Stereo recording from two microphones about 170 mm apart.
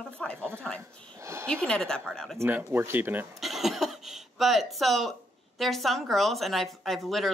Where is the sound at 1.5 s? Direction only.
5° left (ahead or behind).